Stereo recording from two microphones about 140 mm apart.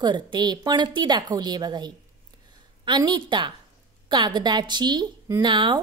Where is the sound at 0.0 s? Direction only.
30° right (ahead or behind).